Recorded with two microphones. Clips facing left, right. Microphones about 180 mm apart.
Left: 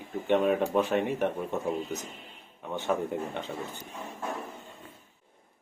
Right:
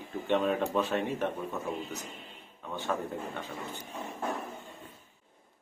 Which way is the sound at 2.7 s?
20° left (ahead or behind).